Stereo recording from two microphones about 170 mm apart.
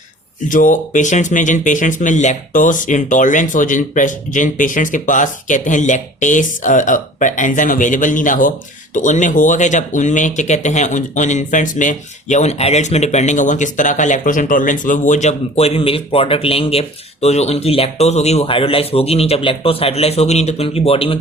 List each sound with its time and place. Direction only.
0.4 s speech: 50° left (ahead or behind); by 21.2 s 35° left (ahead or behind)